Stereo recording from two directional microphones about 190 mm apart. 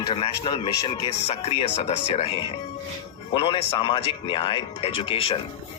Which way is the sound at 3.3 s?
25° left (ahead or behind).